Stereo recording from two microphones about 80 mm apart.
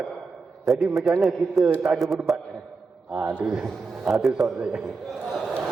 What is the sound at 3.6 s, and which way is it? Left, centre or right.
Speech, centre.